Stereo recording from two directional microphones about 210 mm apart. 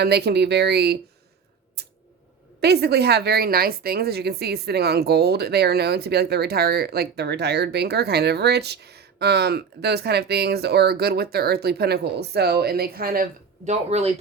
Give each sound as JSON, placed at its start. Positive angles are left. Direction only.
{"t": 0.0, "sound": "speech", "side_deg": -50}
{"t": 2.6, "sound": "speech", "side_deg": -50}
{"t": 13.7, "sound": "speech", "side_deg": -30}